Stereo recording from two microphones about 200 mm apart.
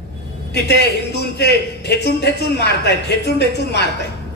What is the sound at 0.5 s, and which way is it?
A man's voice, 55° left (ahead or behind).